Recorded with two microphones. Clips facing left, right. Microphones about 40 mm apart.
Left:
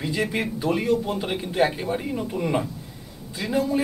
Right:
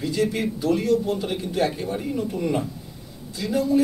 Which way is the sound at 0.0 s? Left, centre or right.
Left.